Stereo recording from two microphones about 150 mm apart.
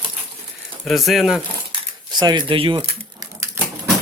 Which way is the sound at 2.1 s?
30° right (ahead or behind).